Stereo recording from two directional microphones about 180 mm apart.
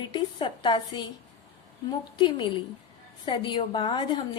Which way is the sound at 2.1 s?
25° left (ahead or behind).